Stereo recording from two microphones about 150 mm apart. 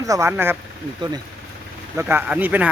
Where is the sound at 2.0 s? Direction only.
15° right (ahead or behind).